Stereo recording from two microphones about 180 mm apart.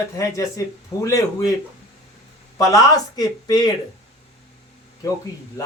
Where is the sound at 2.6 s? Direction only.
20° left (ahead or behind).